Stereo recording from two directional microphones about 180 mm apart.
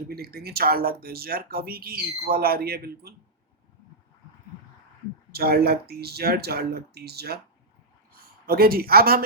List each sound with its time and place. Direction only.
0.1 s speech: 60° right (ahead or behind)
5.3 s speech: 60° right (ahead or behind)
8.4 s speech: 55° right (ahead or behind)